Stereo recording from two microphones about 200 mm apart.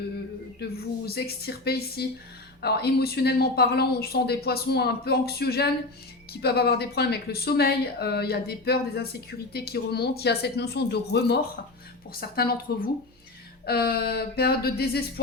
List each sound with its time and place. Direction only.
0.6 s speech: 50° left (ahead or behind)